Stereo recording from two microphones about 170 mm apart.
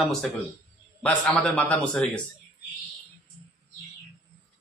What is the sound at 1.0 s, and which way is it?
A man's voice, 5° left (ahead or behind).